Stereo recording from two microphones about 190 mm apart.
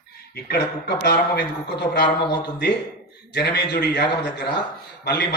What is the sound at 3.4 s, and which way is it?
A man's voice, 60° left (ahead or behind).